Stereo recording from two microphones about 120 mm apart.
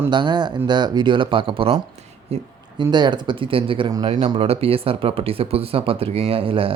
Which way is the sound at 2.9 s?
40° right (ahead or behind).